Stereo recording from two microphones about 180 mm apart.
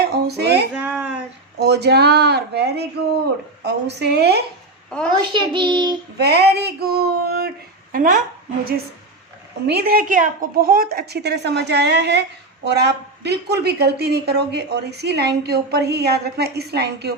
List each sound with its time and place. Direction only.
0.0 s female singing: 65° right (ahead or behind)
0.7 s a sound: 10° right (ahead or behind)
1.5 s a woman's voice: 70° right (ahead or behind)
5.3 s a child's voice: 25° right (ahead or behind)
6.1 s a sound: 65° right (ahead or behind)
7.9 s a woman's voice: 50° right (ahead or behind)
9.6 s a woman's voice: 60° right (ahead or behind)